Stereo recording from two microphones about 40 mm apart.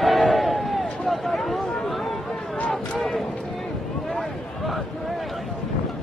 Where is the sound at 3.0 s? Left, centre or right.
Centre.